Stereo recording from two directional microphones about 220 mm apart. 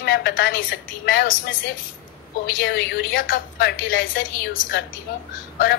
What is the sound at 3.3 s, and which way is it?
A woman's voice, 40° left (ahead or behind).